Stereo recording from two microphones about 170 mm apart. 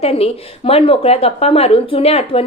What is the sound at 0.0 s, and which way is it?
A woman's voice, 35° left (ahead or behind).